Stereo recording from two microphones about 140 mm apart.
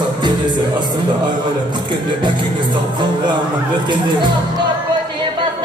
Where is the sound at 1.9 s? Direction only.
35° right (ahead or behind).